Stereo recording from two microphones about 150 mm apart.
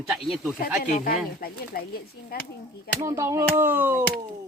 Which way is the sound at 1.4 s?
80° left.